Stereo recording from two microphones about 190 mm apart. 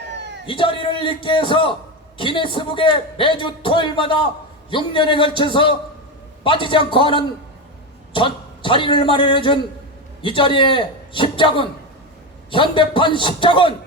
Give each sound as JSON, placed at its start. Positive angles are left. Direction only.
{"t": 0.2, "sound": "cat", "side_deg": -65}
{"t": 0.4, "sound": "a man's voice", "side_deg": 25}